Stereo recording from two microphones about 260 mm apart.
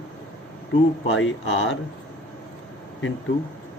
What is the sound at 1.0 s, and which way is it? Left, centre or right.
Speech, left.